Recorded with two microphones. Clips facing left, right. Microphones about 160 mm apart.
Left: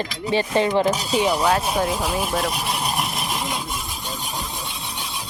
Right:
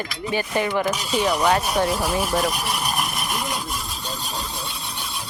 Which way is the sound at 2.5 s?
25° left (ahead or behind).